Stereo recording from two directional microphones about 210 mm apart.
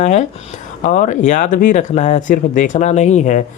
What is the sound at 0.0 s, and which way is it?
Speech, 35° left (ahead or behind).